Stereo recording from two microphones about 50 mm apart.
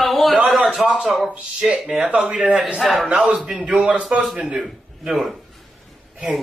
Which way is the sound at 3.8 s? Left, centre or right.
Right.